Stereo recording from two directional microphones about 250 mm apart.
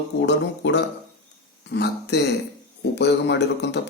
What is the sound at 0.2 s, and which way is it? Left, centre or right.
Speech, left.